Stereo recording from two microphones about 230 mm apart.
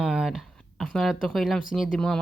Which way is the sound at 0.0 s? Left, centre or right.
Centre.